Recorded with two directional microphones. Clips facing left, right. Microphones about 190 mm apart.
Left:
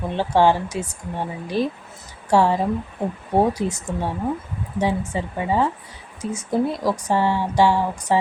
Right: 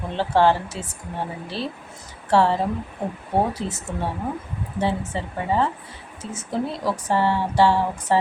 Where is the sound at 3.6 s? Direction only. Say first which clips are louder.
Left 5 dB; 15° left (ahead or behind).